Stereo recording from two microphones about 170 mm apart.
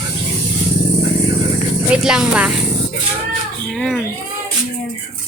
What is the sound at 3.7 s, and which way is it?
Speech, centre (ahead or behind).